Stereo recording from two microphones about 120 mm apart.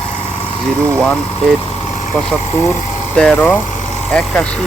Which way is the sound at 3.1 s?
10° left (ahead or behind).